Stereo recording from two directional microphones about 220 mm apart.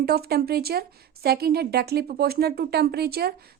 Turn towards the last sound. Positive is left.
turn(degrees=-45)  # may be behind; listen again after turning